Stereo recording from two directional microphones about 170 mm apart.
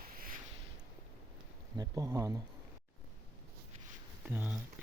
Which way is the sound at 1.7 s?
20° right (ahead or behind).